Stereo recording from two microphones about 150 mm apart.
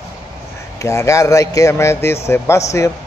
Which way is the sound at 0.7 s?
20° left (ahead or behind).